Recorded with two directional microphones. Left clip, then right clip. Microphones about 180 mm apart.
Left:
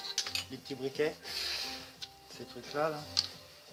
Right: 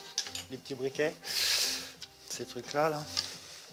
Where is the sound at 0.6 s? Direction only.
25° right (ahead or behind).